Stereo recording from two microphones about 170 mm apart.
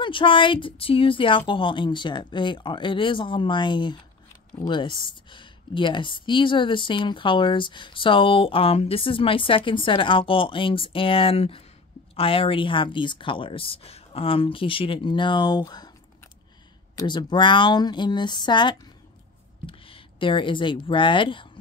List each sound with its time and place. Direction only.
0.0 s speech: 30° left (ahead or behind)
16.9 s speech: 25° left (ahead or behind)